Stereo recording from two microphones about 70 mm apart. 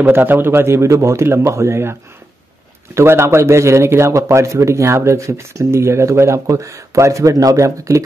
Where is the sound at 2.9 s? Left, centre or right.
Right.